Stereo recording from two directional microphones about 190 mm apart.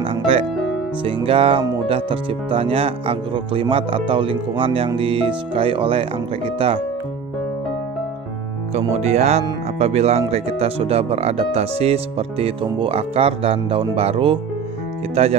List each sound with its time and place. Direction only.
0.0 s music: 30° right (ahead or behind)
1.0 s speech: 30° right (ahead or behind)
8.7 s speech: 35° right (ahead or behind)